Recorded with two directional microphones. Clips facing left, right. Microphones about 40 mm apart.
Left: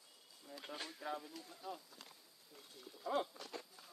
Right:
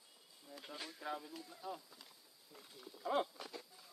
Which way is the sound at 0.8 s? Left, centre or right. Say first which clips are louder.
Right 1 dB; centre.